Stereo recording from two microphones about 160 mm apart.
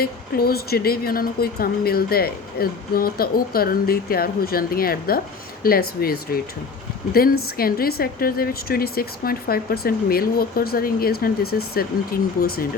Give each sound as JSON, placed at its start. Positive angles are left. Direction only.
{"t": 0.0, "sound": "a woman's voice", "side_deg": 70}